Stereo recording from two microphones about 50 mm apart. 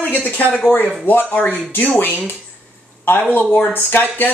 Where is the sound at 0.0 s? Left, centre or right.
Left.